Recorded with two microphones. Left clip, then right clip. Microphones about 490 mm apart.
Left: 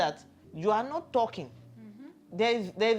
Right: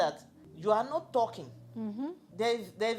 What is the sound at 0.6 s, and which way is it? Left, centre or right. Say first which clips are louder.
Speech: left 1 dB; centre.